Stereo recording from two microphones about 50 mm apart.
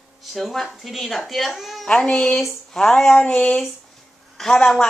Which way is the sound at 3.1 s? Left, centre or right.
Centre.